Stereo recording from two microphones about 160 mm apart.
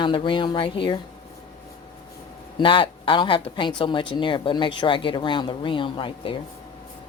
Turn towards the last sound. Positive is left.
turn(degrees=30)  # may be behind; listen again after turning